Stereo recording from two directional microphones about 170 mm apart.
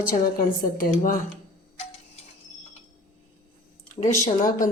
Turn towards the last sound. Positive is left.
turn(degrees=50)  # may be behind; listen again after turning